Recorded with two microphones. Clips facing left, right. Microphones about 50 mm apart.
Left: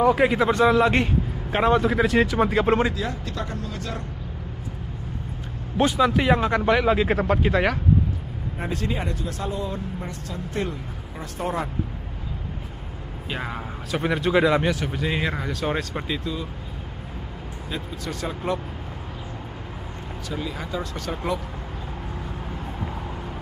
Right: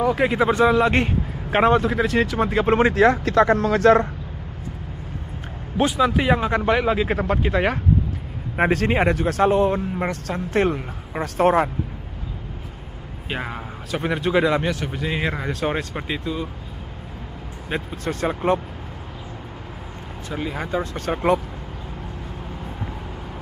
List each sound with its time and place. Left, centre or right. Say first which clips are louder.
0.0 s speech: even; centre
1.0 s vehicle: even; centre
1.7 s speech: right 1 dB; centre
2.9 s speech: right 13 dB; right
5.8 s speech: right 1 dB; centre
8.5 s speech: right 10 dB; right
13.3 s speech: right 2 dB; centre
15.4 s speech: right 2 dB; right
17.6 s speech: right 6 dB; right
20.2 s speech: right 4 dB; right